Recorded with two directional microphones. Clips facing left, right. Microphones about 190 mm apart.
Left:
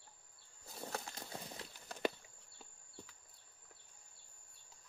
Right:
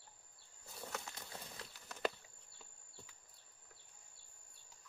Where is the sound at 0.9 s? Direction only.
30° left (ahead or behind).